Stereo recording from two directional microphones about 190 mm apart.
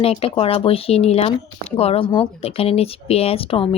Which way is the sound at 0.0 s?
30° left (ahead or behind).